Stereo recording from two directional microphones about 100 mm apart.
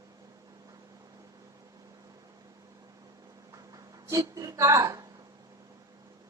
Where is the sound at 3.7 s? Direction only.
35° right (ahead or behind).